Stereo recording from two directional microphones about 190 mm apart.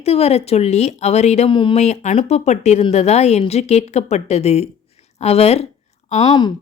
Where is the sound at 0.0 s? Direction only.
35° left (ahead or behind).